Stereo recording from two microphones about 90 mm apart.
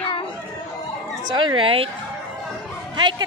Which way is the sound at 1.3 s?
70° right (ahead or behind).